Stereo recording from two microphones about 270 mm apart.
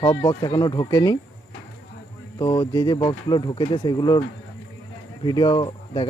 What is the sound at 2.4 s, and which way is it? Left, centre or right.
Speech, centre.